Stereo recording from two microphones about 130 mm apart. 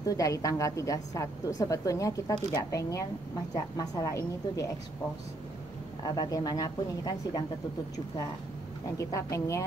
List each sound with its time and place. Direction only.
0.0 s a woman's voice: 25° left (ahead or behind)
6.0 s a woman's voice: 30° left (ahead or behind)
8.9 s a woman's voice: 25° left (ahead or behind)